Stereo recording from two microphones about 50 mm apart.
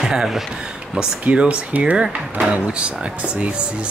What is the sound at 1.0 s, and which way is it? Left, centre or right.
Speech, right.